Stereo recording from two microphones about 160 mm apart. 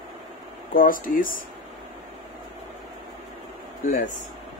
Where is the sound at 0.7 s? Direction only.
60° left (ahead or behind).